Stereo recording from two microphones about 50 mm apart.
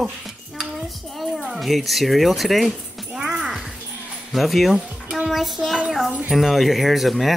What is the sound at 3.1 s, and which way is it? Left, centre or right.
Music, centre.